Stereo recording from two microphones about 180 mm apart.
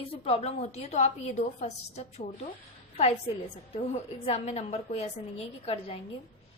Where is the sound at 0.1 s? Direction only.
35° left (ahead or behind).